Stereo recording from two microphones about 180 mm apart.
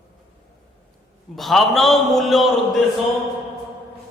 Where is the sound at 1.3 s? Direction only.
Centre (ahead or behind).